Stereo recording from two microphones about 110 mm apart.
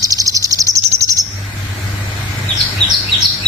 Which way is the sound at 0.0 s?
30° right (ahead or behind).